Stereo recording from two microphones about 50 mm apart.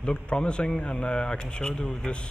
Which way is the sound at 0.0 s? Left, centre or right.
Centre.